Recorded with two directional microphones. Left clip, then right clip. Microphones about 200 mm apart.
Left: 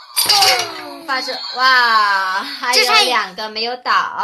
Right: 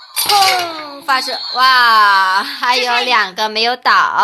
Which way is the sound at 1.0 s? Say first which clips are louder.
Right 5 dB; 35° right (ahead or behind).